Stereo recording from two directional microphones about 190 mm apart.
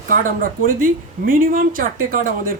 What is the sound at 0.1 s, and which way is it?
Speech, 45° right (ahead or behind).